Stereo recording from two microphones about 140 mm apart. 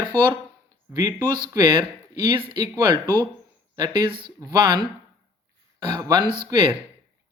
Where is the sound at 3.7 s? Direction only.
30° right (ahead or behind).